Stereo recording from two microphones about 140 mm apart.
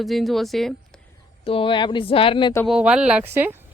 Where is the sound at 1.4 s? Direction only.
40° left (ahead or behind).